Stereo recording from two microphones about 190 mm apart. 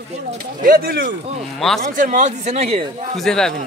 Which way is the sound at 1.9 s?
45° right (ahead or behind).